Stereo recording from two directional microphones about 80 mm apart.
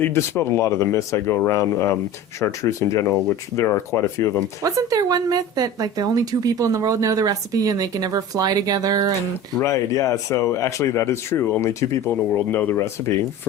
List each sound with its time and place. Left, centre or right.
0.0 s speech: left
4.6 s speech: right
9.6 s speech: left
12.3 s speech: left